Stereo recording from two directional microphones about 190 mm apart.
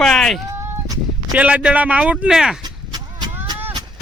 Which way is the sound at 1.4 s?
5° right (ahead or behind).